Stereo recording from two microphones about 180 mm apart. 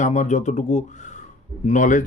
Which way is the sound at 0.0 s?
40° left (ahead or behind).